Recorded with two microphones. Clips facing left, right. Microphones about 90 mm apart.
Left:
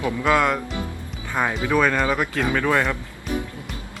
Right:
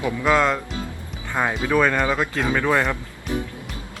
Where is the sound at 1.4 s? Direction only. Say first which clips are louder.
Even; 20° right (ahead or behind).